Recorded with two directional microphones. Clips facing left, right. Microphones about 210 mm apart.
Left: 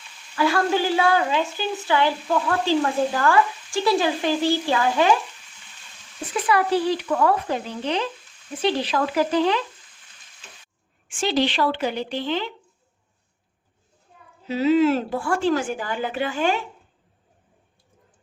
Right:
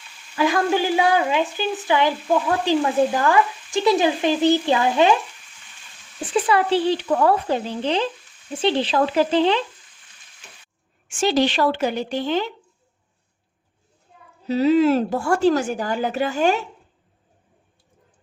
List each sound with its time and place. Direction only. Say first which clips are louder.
0.3 s speech: right 1 dB; 15° right (ahead or behind)
1.7 s stir: right 1 dB; 15° right (ahead or behind)
6.3 s stir: right 2 dB; 30° right (ahead or behind)
11.1 s a woman's voice: right 3 dB; 45° right (ahead or behind)
14.4 s speech: right 2 dB; 40° right (ahead or behind)